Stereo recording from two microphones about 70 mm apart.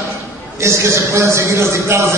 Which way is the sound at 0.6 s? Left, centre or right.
Right.